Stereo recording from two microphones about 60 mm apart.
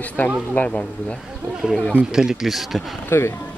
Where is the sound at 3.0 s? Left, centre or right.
Left.